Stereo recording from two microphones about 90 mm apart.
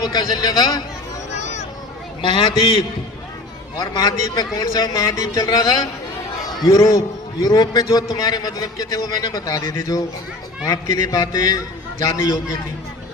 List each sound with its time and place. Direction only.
0.0 s a man's voice: 50° left (ahead or behind)
2.2 s a man's voice: 60° left (ahead or behind); by 12.4 s 40° left (ahead or behind)